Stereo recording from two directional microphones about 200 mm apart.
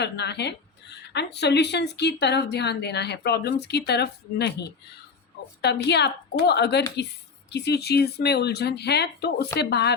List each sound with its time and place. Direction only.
0.0 s speech: 55° left (ahead or behind)
5.6 s speech: 60° left (ahead or behind)